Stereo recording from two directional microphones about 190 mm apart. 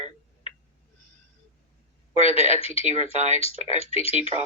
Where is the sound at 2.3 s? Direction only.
30° left (ahead or behind).